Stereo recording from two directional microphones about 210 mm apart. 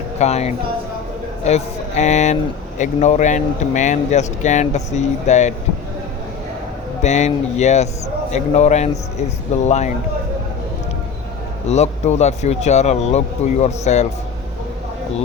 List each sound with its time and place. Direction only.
0.2 s speech: 30° left (ahead or behind)
7.0 s speech: 35° left (ahead or behind)
11.7 s speech: 30° left (ahead or behind)